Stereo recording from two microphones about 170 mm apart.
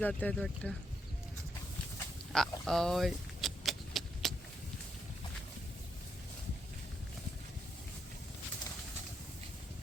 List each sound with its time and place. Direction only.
0.0 s speech: 10° left (ahead or behind)
2.3 s vehicle: centre (ahead or behind)